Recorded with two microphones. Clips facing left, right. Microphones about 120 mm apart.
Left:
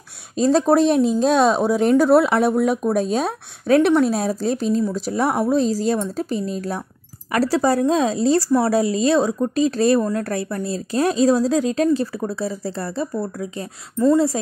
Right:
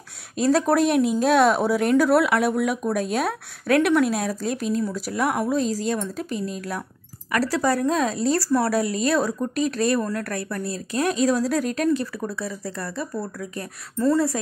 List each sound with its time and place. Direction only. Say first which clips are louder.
0.4 s a woman's voice: left 4 dB; 25° left (ahead or behind)